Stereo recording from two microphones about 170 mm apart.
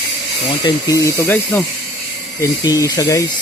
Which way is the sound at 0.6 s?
20° left (ahead or behind).